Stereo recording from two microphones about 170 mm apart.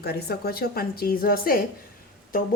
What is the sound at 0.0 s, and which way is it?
A woman's voice, 65° left (ahead or behind).